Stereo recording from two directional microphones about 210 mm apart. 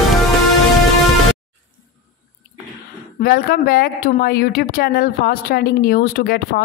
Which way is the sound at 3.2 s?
45° left (ahead or behind).